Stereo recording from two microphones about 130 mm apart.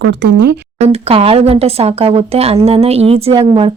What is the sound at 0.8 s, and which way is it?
Speech, 50° right (ahead or behind).